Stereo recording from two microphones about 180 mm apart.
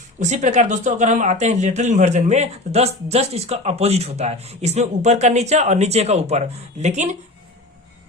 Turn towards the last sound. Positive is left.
turn(degrees=-40)  # may be behind; listen again after turning